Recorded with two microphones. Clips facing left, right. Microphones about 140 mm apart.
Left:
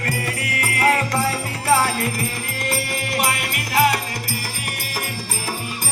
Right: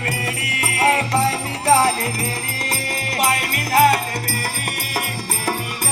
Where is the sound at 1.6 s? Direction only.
35° right (ahead or behind).